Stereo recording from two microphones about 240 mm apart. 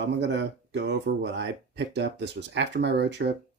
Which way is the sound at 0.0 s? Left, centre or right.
Right.